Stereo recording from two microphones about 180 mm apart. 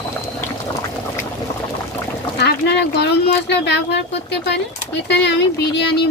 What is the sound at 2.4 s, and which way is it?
Speech, 70° left (ahead or behind).